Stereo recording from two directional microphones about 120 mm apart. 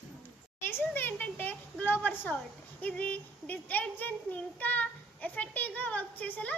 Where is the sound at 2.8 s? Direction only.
10° left (ahead or behind).